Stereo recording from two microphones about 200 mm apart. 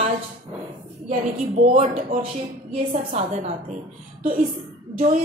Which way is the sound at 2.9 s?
35° right (ahead or behind).